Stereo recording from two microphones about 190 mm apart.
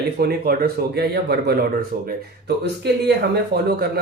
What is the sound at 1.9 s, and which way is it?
Speech, 45° right (ahead or behind).